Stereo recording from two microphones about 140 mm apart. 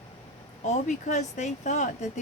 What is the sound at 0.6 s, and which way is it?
Speech, 55° left (ahead or behind).